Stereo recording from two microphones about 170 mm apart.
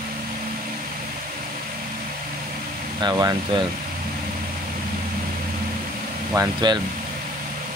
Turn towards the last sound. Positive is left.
turn(degrees=-20)  # may be behind; listen again after turning